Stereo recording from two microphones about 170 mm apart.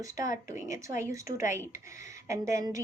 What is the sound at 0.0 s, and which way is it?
Speech, 20° right (ahead or behind).